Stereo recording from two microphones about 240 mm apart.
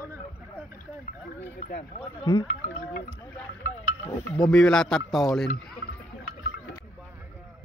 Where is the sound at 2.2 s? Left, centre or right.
Centre.